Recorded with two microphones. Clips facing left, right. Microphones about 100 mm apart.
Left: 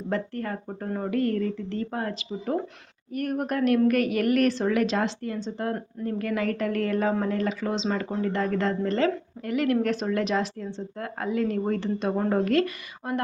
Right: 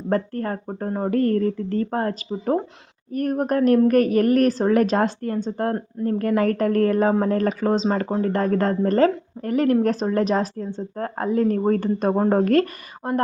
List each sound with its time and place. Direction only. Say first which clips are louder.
0.1 s a woman's voice: right 6 dB; 40° right (ahead or behind)